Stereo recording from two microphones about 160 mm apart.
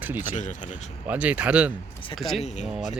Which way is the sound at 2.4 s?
45° left (ahead or behind).